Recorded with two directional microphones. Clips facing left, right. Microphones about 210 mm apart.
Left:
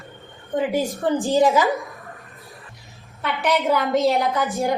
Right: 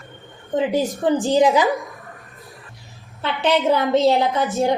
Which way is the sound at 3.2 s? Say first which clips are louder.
Right 3 dB; 25° right (ahead or behind).